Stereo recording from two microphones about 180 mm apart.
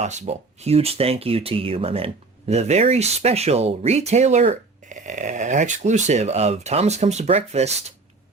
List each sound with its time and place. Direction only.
0.0 s speech: 40° right (ahead or behind)